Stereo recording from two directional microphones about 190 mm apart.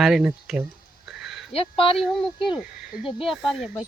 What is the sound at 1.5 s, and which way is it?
Speech, 30° left (ahead or behind).